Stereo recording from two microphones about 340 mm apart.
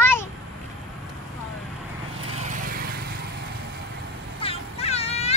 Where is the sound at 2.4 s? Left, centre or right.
Right.